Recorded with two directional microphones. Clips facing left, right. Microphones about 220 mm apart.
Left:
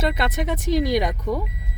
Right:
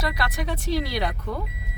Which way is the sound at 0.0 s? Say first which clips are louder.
Left 5 dB; 25° left (ahead or behind).